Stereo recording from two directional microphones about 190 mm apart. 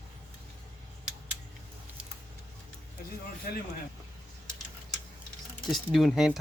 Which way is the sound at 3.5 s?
50° left (ahead or behind).